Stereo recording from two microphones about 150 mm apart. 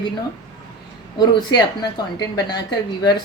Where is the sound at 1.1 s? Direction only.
30° left (ahead or behind).